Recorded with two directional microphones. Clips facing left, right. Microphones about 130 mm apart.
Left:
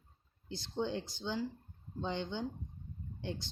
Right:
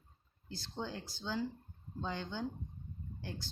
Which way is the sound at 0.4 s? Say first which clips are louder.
Left 5 dB; 20° left (ahead or behind).